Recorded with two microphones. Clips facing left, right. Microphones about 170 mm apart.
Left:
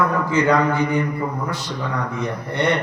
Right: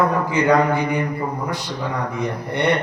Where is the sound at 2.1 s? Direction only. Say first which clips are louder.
Right 1 dB; 15° right (ahead or behind).